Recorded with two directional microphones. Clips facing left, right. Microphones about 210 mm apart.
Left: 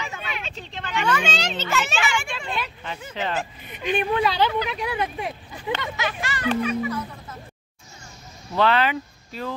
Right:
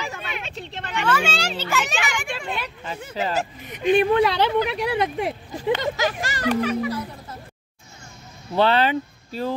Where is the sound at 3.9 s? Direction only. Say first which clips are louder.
Right 5 dB; 70° right (ahead or behind).